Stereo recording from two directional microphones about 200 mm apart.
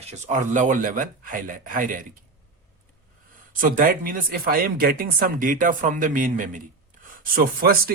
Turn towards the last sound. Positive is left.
turn(degrees=-45)  # may be behind; listen again after turning